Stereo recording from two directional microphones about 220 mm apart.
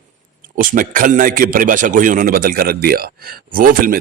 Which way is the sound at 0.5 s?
40° right (ahead or behind).